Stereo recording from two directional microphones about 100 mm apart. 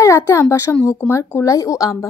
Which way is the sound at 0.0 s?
30° left (ahead or behind).